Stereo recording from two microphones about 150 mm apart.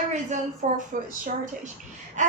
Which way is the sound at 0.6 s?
55° right (ahead or behind).